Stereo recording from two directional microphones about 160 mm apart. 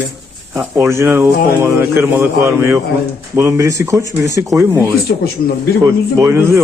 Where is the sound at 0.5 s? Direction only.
15° right (ahead or behind).